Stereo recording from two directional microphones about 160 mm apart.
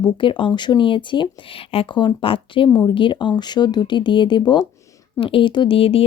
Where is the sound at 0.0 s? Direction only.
30° left (ahead or behind).